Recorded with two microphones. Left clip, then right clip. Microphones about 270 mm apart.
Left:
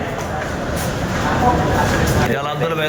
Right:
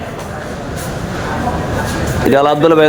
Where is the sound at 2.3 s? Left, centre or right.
Right.